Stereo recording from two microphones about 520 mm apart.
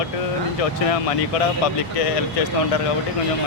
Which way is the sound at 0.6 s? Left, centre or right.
Left.